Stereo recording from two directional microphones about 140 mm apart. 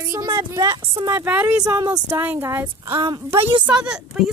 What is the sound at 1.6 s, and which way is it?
Speech, 25° right (ahead or behind).